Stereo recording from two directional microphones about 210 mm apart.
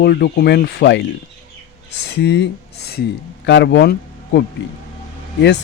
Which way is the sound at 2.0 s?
55° left (ahead or behind).